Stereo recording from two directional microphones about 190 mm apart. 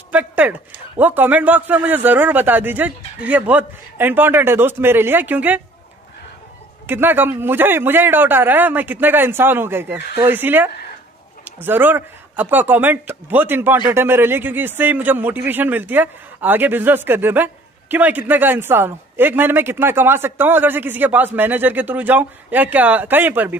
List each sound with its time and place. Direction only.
0.1 s speech: 10° right (ahead or behind)
6.9 s speech: 10° right (ahead or behind)